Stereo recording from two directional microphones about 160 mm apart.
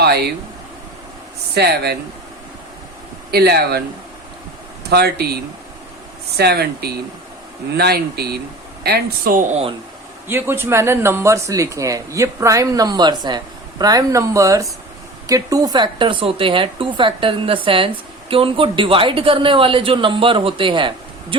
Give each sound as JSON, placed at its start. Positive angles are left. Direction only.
{"t": 0.0, "sound": "speech", "side_deg": -90}
{"t": 1.5, "sound": "speech", "side_deg": -90}
{"t": 3.3, "sound": "speech", "side_deg": -90}
{"t": 4.9, "sound": "speech", "side_deg": -90}
{"t": 10.2, "sound": "speech", "side_deg": -15}